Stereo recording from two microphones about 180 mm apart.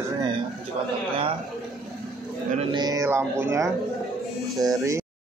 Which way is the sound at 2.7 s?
20° right (ahead or behind).